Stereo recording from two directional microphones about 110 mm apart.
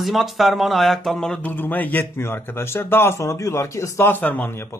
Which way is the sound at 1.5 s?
15° left (ahead or behind).